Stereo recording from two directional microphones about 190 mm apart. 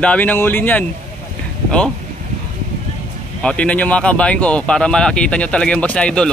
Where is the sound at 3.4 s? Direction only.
5° left (ahead or behind).